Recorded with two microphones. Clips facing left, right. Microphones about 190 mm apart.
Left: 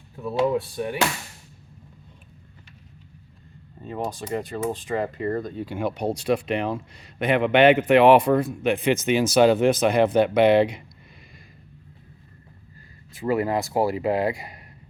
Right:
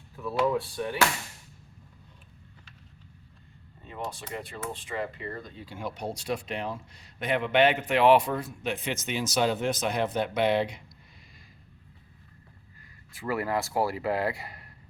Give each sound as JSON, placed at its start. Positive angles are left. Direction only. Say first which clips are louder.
{"t": 0.3, "sound": "speech", "louder": "left 4 dB", "side_deg": 25}
{"t": 3.8, "sound": "speech", "louder": "left 8 dB", "side_deg": 40}
{"t": 8.4, "sound": "speech", "louder": "left 10 dB", "side_deg": 75}
{"t": 13.1, "sound": "speech", "louder": "left 6 dB", "side_deg": 20}